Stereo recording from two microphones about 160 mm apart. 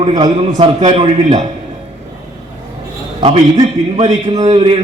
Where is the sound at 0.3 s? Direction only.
40° right (ahead or behind).